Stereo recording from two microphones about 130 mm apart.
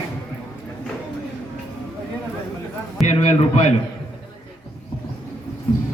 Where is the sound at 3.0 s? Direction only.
60° left (ahead or behind).